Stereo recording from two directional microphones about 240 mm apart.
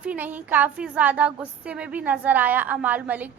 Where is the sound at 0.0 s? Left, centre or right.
Centre.